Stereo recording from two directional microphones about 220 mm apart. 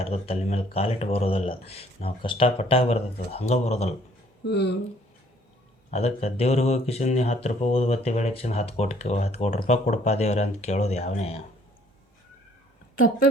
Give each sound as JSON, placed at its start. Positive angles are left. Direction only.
{"t": 0.0, "sound": "speech", "side_deg": 25}
{"t": 4.4, "sound": "speech", "side_deg": 50}
{"t": 5.9, "sound": "speech", "side_deg": 30}